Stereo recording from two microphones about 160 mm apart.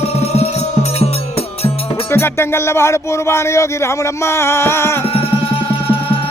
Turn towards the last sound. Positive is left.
turn(degrees=15)  # may be behind; listen again after turning